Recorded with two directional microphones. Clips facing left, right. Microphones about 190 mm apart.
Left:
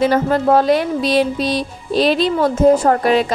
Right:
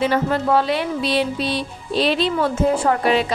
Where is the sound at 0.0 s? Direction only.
40° left (ahead or behind).